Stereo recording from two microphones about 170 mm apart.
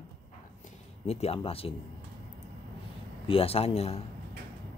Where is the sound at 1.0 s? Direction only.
40° left (ahead or behind).